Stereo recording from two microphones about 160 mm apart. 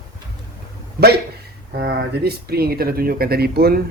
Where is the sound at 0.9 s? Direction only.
90° right.